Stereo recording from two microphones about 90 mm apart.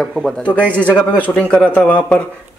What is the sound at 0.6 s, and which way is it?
A man's voice, 15° left (ahead or behind).